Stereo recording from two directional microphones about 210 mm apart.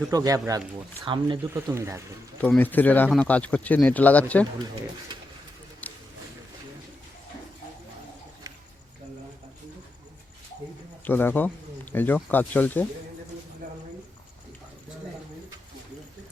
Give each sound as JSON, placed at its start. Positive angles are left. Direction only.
{"t": 0.1, "sound": "speech", "side_deg": -15}
{"t": 1.5, "sound": "speech", "side_deg": -10}
{"t": 2.4, "sound": "speech", "side_deg": 5}
{"t": 5.8, "sound": "a sound", "side_deg": 5}
{"t": 11.0, "sound": "speech", "side_deg": 10}